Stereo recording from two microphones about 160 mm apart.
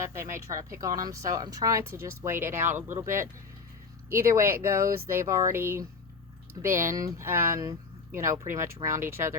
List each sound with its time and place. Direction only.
0.1 s a woman's voice: 20° right (ahead or behind)